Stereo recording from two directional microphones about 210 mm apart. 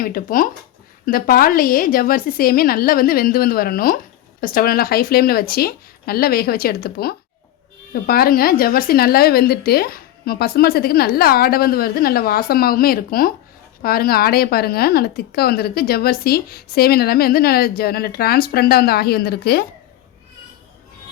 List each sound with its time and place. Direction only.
0.0 s a woman's voice: 45° left (ahead or behind)